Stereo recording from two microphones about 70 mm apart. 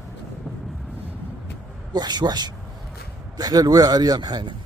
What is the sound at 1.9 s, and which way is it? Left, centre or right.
Speech, right.